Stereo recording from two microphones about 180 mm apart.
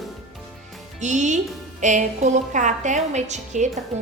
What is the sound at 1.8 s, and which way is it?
A woman's voice, 40° right (ahead or behind).